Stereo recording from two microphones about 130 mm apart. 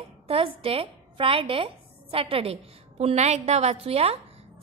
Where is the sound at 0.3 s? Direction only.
45° right (ahead or behind).